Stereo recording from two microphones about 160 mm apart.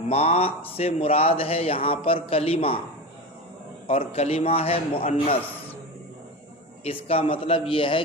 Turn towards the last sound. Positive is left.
turn(degrees=35)  # may be behind; listen again after turning